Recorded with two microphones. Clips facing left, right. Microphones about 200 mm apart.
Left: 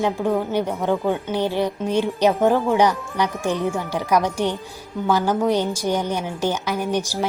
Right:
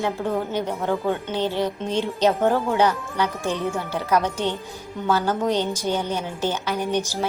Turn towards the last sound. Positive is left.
turn(degrees=15)  # may be behind; listen again after turning